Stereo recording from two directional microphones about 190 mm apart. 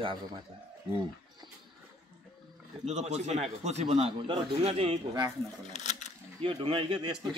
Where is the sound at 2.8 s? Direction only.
35° right (ahead or behind).